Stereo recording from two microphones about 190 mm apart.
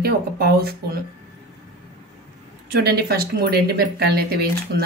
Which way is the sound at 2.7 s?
55° right (ahead or behind).